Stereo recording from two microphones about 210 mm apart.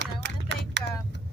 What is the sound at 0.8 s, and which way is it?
Vehicle, 55° right (ahead or behind).